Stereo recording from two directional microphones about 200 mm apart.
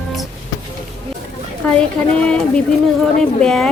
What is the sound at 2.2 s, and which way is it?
Speech, 5° left (ahead or behind).